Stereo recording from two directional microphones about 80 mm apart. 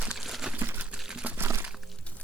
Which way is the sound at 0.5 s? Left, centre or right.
Right.